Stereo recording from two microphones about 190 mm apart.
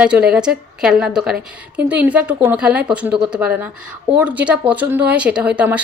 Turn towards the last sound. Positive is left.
turn(degrees=-5)  # may be behind; listen again after turning